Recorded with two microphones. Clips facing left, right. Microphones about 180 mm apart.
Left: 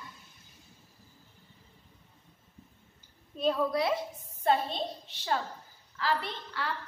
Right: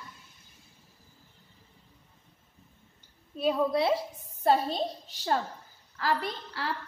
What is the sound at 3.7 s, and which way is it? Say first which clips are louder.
Speech: right 3 dB; 30° right (ahead or behind).